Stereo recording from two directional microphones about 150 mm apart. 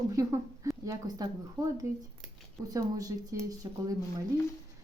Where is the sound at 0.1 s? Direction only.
20° right (ahead or behind).